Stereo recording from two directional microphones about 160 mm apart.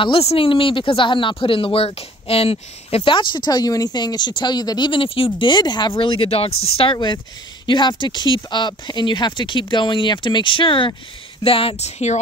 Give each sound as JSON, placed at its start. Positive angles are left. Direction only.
{"t": 0.0, "sound": "speech", "side_deg": 35}